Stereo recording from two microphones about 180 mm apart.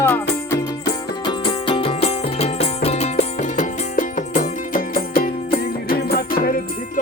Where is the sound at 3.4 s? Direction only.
45° left (ahead or behind).